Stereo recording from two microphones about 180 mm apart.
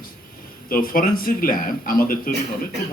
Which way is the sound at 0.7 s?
50° left (ahead or behind).